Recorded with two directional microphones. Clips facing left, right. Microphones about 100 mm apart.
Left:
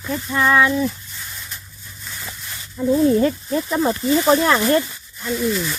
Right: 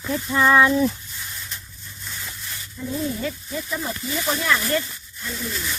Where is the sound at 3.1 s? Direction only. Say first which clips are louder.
Left 11 dB; 50° left (ahead or behind).